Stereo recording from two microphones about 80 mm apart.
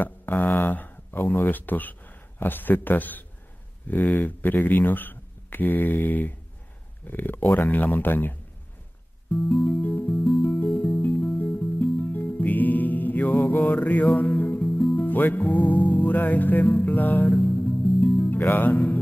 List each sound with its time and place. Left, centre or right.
0.0 s speech: left
9.5 s music: centre
9.8 s speech: left
10.4 s music: left
15.0 s speech: left
17.6 s music: centre